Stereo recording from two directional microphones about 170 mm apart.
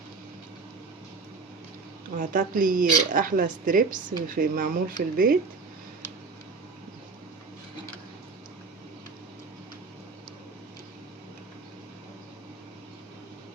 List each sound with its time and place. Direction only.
2.1 s speech: 55° right (ahead or behind)